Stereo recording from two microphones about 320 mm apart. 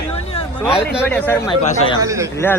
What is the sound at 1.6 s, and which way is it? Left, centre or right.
Speech, centre.